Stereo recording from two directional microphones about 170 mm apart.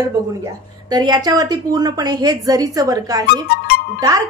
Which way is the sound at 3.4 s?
65° left (ahead or behind).